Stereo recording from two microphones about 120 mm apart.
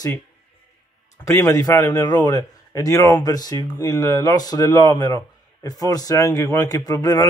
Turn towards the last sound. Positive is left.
turn(degrees=30)  # may be behind; listen again after turning